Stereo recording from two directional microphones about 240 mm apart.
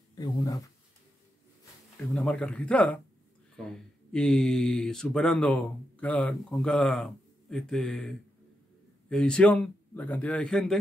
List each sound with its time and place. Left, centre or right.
0.1 s speech: centre
2.1 s speech: centre